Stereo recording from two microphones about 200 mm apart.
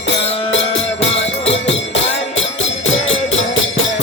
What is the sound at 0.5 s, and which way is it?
Music, 70° left (ahead or behind).